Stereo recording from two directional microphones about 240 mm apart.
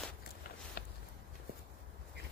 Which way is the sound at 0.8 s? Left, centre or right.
Left.